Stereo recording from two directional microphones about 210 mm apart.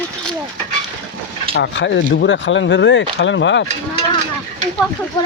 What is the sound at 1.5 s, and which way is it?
Speech, 60° left (ahead or behind).